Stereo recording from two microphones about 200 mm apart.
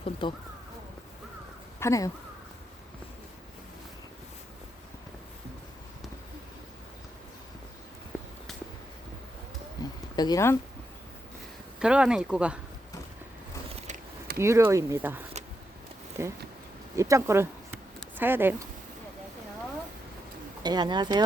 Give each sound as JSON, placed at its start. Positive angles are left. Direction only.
{"t": 0.0, "sound": "speech", "side_deg": 25}
{"t": 1.8, "sound": "speech", "side_deg": 15}
{"t": 9.8, "sound": "a sound", "side_deg": 20}
{"t": 10.2, "sound": "speech", "side_deg": 20}
{"t": 11.8, "sound": "speech", "side_deg": -5}
{"t": 13.7, "sound": "a sound", "side_deg": -30}
{"t": 14.3, "sound": "speech", "side_deg": -15}
{"t": 20.6, "sound": "speech", "side_deg": -20}